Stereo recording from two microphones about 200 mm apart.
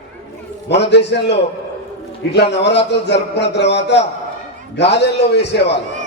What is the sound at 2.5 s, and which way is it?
A man's voice, 60° left (ahead or behind).